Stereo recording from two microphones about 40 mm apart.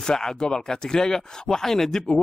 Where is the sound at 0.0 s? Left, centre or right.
Centre.